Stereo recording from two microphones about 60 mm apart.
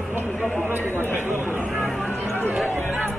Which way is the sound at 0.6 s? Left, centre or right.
Right.